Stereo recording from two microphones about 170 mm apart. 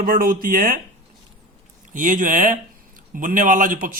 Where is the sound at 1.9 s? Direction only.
50° right (ahead or behind).